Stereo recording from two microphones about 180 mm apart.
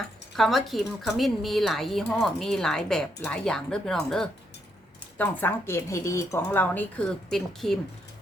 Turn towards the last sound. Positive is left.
turn(degrees=0)  # may be behind; listen again after turning